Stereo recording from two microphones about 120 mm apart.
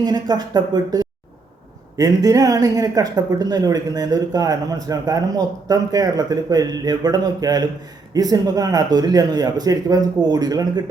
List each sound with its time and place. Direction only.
0.0 s speech: 35° right (ahead or behind)